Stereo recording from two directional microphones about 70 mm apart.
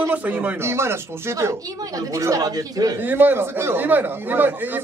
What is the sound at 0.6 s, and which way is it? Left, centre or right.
Speech, right.